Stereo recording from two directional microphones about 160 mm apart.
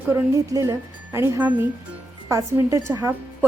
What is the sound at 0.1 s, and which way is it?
A woman's voice, 15° right (ahead or behind).